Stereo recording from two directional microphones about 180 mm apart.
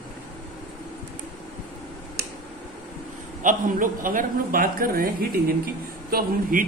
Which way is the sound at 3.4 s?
50° right (ahead or behind).